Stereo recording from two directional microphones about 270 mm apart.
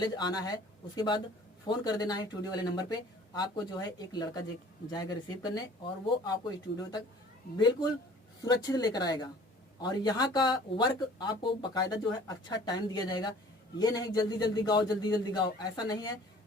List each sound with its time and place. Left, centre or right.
0.0 s speech: centre